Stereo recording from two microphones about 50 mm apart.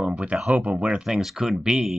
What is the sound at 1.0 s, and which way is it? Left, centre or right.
Speech, centre.